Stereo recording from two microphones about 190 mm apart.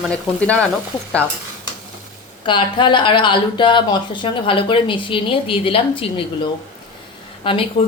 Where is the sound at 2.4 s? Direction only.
25° left (ahead or behind).